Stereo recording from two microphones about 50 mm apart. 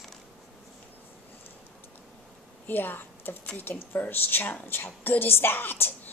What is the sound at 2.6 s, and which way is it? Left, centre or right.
A woman's voice, left.